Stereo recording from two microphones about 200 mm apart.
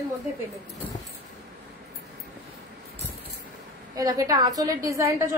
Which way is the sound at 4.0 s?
20° right (ahead or behind).